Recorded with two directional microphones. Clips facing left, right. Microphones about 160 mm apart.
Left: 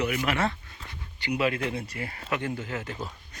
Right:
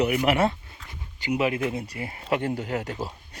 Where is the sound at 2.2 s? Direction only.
35° right (ahead or behind).